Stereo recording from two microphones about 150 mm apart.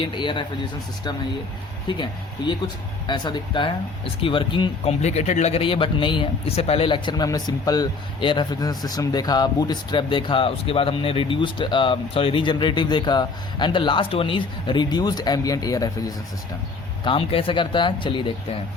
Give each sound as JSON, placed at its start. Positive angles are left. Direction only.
{"t": 0.0, "sound": "speech", "side_deg": 30}
{"t": 1.9, "sound": "speech", "side_deg": 30}
{"t": 4.9, "sound": "speech", "side_deg": 45}
{"t": 17.0, "sound": "speech", "side_deg": 35}